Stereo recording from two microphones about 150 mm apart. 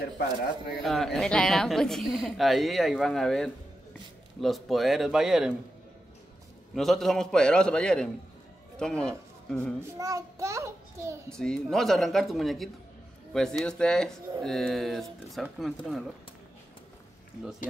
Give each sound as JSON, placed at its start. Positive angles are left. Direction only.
{"t": 0.8, "sound": "a woman's voice", "side_deg": 0}
{"t": 6.7, "sound": "a woman's voice", "side_deg": 0}
{"t": 9.9, "sound": "a child's voice", "side_deg": -20}
{"t": 11.3, "sound": "a woman's voice", "side_deg": 5}